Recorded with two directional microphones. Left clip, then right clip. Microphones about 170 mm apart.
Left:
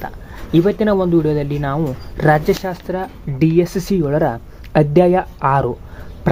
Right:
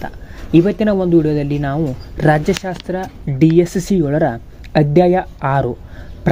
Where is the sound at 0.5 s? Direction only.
25° right (ahead or behind).